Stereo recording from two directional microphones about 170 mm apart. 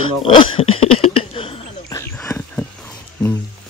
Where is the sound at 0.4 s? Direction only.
30° left (ahead or behind).